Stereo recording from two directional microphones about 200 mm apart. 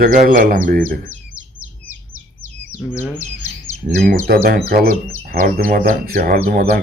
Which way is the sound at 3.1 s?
35° left (ahead or behind).